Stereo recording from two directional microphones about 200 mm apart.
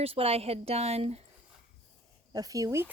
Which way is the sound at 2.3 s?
15° right (ahead or behind).